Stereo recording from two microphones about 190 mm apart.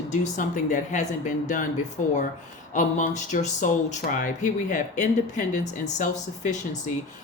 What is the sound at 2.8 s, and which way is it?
Speech, 40° left (ahead or behind).